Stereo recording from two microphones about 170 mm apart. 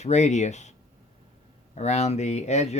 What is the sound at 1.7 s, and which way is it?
Speech, 40° left (ahead or behind).